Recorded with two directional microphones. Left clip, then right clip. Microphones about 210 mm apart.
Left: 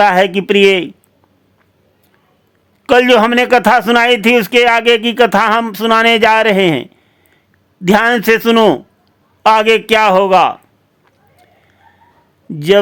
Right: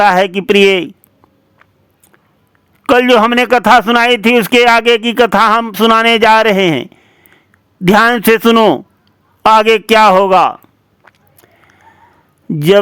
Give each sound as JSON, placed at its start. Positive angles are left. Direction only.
{"t": 0.0, "sound": "speech", "side_deg": -20}
{"t": 2.8, "sound": "speech", "side_deg": -20}